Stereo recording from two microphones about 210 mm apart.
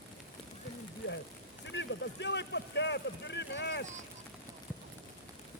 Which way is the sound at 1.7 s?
55° left (ahead or behind).